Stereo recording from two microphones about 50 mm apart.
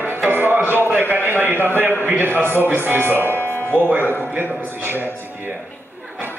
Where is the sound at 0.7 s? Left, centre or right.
Right.